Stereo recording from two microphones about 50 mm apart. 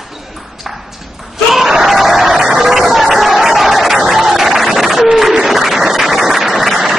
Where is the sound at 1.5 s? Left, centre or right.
Centre.